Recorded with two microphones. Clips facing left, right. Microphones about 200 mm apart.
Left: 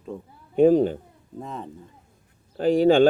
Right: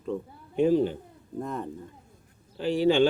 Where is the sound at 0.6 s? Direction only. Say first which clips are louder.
Left 6 dB; 50° left (ahead or behind).